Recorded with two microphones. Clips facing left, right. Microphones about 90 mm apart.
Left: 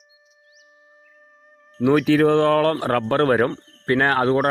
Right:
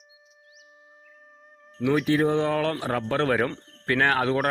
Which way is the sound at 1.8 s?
65° left (ahead or behind).